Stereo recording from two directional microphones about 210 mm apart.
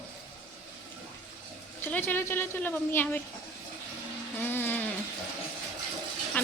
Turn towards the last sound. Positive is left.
turn(degrees=10)  # may be behind; listen again after turning